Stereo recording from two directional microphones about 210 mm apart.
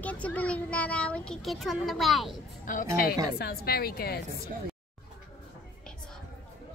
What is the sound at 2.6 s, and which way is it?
A woman's voice, 40° left (ahead or behind).